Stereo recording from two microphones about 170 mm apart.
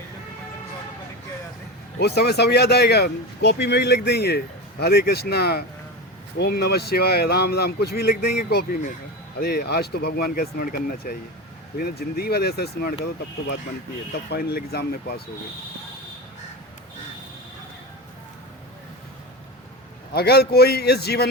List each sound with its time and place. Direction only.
2.0 s speech: 70° left (ahead or behind)
14.3 s speech: 65° left (ahead or behind)
20.1 s speech: 70° left (ahead or behind)